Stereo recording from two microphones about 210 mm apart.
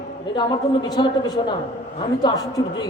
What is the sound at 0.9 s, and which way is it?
A woman's voice, 20° left (ahead or behind).